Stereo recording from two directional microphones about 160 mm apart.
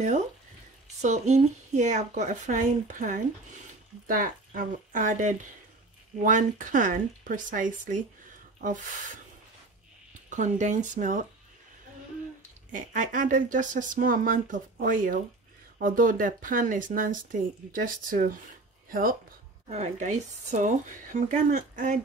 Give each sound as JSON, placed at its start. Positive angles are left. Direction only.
{"t": 1.0, "sound": "speech", "side_deg": -45}
{"t": 10.3, "sound": "speech", "side_deg": -50}
{"t": 12.7, "sound": "speech", "side_deg": -55}
{"t": 19.7, "sound": "speech", "side_deg": -45}